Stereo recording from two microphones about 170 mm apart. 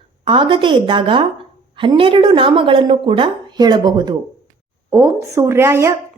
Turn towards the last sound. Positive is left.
turn(degrees=-15)  # may be behind; listen again after turning